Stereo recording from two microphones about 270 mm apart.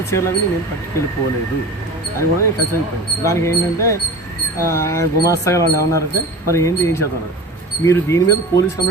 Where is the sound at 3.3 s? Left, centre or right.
Centre.